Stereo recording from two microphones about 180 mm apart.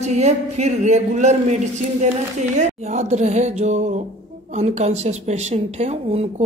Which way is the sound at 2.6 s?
40° right (ahead or behind).